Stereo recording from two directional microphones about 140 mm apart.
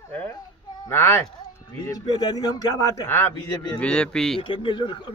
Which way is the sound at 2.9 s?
15° left (ahead or behind).